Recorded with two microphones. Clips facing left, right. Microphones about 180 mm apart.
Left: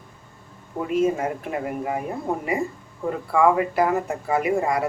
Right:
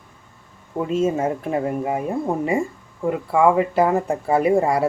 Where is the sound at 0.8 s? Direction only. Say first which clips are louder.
Right 1 dB; 25° right (ahead or behind).